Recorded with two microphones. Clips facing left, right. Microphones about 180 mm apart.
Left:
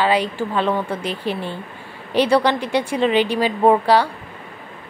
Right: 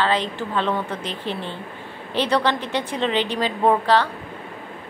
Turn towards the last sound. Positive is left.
turn(degrees=10)  # may be behind; listen again after turning